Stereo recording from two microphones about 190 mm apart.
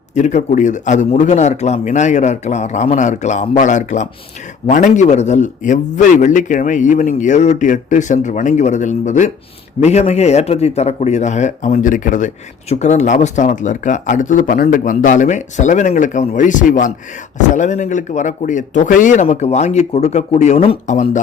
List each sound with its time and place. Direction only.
0.1 s a man's voice: 40° left (ahead or behind)